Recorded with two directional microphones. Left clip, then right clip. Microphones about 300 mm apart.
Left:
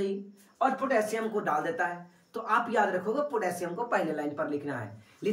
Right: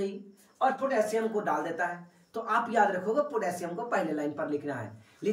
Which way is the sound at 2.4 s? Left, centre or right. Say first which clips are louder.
Right 1 dB; centre.